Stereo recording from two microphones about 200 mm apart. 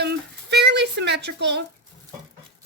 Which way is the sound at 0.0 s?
55° right (ahead or behind).